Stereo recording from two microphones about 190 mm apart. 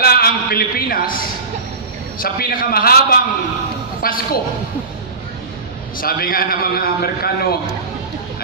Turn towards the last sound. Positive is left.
turn(degrees=55)  # may be behind; listen again after turning